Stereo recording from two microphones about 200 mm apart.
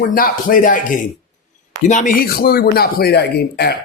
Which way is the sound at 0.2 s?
45° left (ahead or behind).